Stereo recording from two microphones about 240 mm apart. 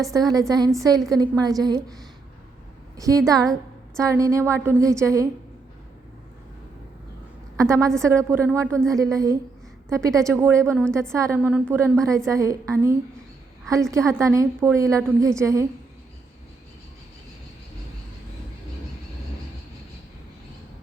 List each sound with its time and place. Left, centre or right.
0.0 s a woman's voice: centre
3.0 s a woman's voice: centre
7.5 s a woman's voice: centre